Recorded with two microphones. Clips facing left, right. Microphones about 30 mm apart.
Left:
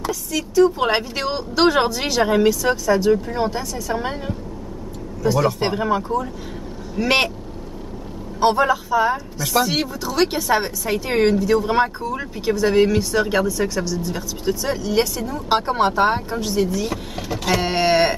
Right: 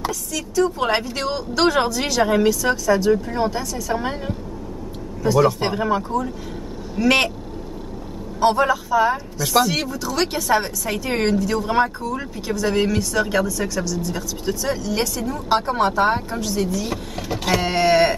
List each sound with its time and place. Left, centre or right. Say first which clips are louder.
0.1 s speech: left 3 dB; centre
7.0 s speech: right 1 dB; centre
8.4 s speech: even; centre
9.1 s speech: right 1 dB; centre
9.7 s speech: left 1 dB; centre
16.8 s speech: left 1 dB; centre
17.6 s speech: right 1 dB; centre